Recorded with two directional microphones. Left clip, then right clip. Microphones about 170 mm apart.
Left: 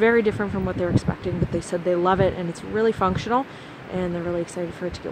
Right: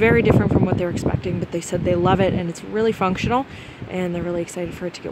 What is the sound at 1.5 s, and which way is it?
Speech, 25° right (ahead or behind).